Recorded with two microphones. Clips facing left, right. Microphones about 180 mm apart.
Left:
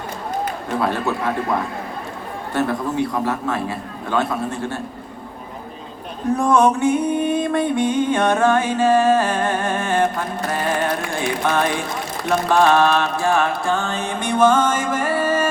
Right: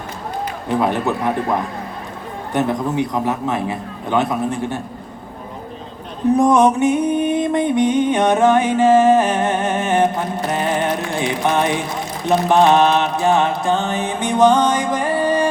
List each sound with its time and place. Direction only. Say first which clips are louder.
0.8 s a man's voice: right 3 dB; 20° right (ahead or behind)
6.3 s music: right 2 dB; 20° right (ahead or behind)